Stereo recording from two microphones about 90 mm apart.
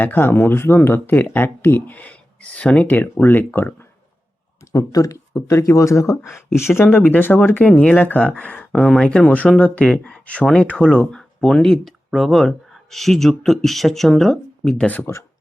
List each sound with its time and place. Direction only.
0.0 s speech: 20° left (ahead or behind)
4.7 s speech: 40° left (ahead or behind); by 14.8 s 5° left (ahead or behind)